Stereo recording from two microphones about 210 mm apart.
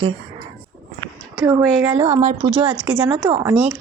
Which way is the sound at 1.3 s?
10° right (ahead or behind).